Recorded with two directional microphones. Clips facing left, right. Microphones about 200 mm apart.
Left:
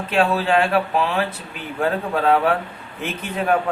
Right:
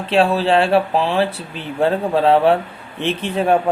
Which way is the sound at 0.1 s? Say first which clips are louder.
Right 4 dB; 30° right (ahead or behind).